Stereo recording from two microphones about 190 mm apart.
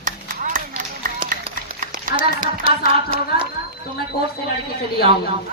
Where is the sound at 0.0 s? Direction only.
45° right (ahead or behind).